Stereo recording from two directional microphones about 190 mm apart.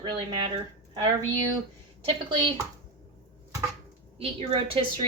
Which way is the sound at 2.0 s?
25° right (ahead or behind).